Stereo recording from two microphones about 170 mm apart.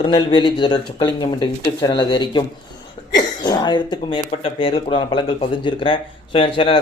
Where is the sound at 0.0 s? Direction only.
30° left (ahead or behind).